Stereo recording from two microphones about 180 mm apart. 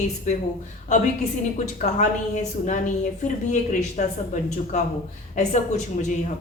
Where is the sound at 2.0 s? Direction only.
40° left (ahead or behind).